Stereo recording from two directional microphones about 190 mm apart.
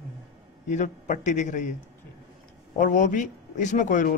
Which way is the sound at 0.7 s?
40° left (ahead or behind).